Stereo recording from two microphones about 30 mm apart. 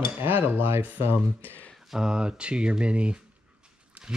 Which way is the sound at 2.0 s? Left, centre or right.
Right.